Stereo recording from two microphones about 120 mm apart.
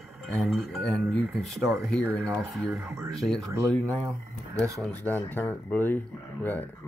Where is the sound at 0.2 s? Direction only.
Centre (ahead or behind).